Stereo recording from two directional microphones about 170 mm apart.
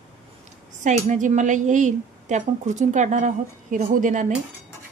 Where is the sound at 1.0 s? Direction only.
45° right (ahead or behind).